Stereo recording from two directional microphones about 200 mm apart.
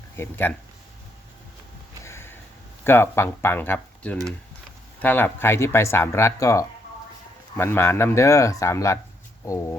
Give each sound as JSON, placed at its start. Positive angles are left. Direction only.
{"t": 0.2, "sound": "speech", "side_deg": 10}
{"t": 2.0, "sound": "sniff", "side_deg": 10}
{"t": 2.8, "sound": "speech", "side_deg": 10}